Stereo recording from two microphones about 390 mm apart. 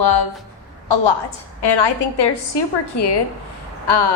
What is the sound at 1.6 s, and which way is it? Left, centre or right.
A woman's voice, left.